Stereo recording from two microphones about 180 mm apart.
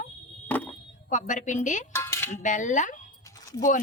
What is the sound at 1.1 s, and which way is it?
Speech, 45° left (ahead or behind).